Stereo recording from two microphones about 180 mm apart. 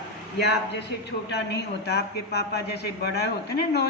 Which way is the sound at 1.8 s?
65° left (ahead or behind).